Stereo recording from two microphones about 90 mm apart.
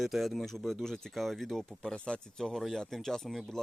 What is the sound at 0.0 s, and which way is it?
Speech, centre (ahead or behind).